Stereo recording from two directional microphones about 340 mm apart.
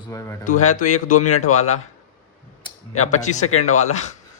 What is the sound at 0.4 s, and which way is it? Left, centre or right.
Speech, left.